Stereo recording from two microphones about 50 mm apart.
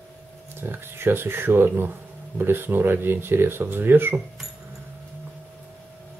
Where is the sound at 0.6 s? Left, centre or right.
Right.